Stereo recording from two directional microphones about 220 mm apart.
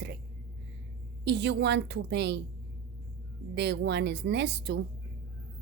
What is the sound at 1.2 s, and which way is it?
A woman's voice, 50° right (ahead or behind).